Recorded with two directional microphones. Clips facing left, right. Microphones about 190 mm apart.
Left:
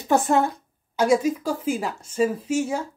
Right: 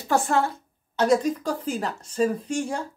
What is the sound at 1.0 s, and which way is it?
Speech, 10° left (ahead or behind).